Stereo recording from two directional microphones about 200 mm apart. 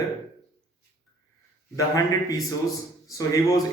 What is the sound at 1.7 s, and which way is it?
A man's voice, 15° left (ahead or behind).